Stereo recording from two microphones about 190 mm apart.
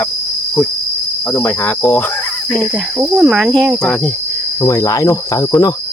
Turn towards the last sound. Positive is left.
turn(degrees=15)  # may be behind; listen again after turning